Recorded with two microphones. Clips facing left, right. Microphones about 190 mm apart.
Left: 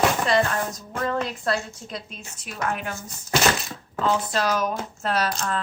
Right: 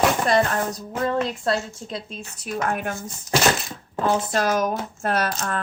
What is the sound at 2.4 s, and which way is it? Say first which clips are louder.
Speech: right 3 dB; 40° right (ahead or behind).